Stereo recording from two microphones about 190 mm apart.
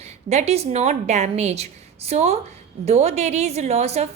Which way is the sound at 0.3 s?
35° right (ahead or behind).